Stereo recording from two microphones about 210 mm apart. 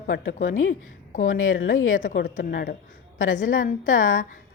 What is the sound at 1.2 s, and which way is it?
Speech, 75° left (ahead or behind).